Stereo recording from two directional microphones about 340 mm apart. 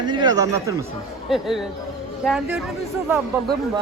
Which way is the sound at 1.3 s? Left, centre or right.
Centre.